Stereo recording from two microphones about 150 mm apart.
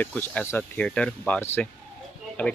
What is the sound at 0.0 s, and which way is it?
Speech, 10° left (ahead or behind).